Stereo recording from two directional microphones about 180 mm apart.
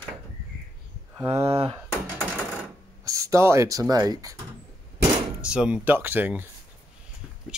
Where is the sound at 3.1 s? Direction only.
15° right (ahead or behind).